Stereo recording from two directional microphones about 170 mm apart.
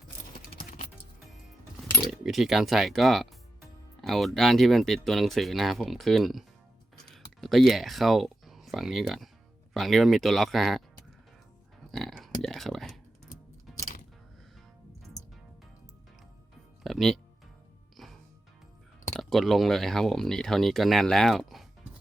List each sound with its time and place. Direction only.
0.3 s music: 60° left (ahead or behind)
2.2 s speech: centre (ahead or behind)
6.9 s a sound: centre (ahead or behind)
9.7 s speech: centre (ahead or behind)
11.9 s a sound: centre (ahead or behind)
13.7 s music: centre (ahead or behind)
16.8 s music: centre (ahead or behind)
19.1 s speech: centre (ahead or behind)